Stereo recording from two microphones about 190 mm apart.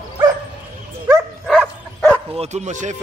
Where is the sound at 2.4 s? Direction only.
35° right (ahead or behind).